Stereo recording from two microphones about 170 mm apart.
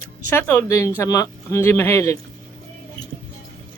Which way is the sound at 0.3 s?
10° left (ahead or behind).